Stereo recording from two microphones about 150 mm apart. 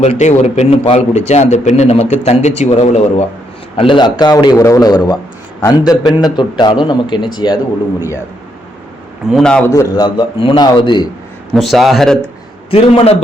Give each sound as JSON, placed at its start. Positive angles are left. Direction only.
{"t": 0.0, "sound": "a man's voice", "side_deg": 50}
{"t": 3.8, "sound": "a man's voice", "side_deg": 30}
{"t": 9.3, "sound": "a man's voice", "side_deg": 5}
{"t": 9.6, "sound": "a man's voice", "side_deg": 25}
{"t": 11.5, "sound": "a man's voice", "side_deg": 0}
{"t": 12.7, "sound": "a man's voice", "side_deg": 40}